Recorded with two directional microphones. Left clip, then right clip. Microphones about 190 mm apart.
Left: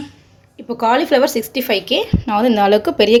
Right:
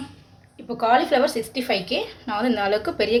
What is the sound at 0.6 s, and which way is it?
A woman's voice, 30° left (ahead or behind).